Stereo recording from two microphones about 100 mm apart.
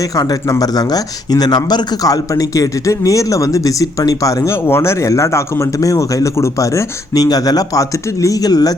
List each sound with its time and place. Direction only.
0.2 s speech: 40° left (ahead or behind)
4.5 s speech: 25° left (ahead or behind); by 8.7 s 40° left (ahead or behind)